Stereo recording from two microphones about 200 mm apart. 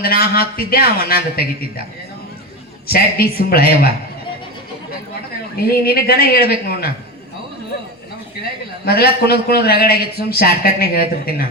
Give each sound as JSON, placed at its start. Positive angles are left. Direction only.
{"t": 0.0, "sound": "a man's voice", "side_deg": 50}
{"t": 2.8, "sound": "a man's voice", "side_deg": 50}
{"t": 5.8, "sound": "a man's voice", "side_deg": 50}
{"t": 8.8, "sound": "a man's voice", "side_deg": 50}